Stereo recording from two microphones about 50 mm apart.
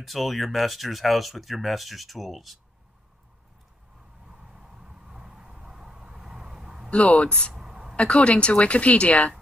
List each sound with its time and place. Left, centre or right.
0.0 s speech: centre
4.3 s vehicle: centre
6.9 s a woman's voice: left
7.5 s a sound: centre
7.9 s a woman's voice: left